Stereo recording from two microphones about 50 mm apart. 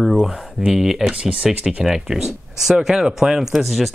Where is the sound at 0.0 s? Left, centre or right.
Centre.